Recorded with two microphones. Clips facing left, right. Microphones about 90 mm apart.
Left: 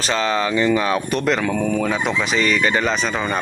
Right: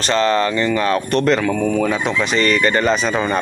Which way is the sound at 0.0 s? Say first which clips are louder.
Right 4 dB; 5° left (ahead or behind).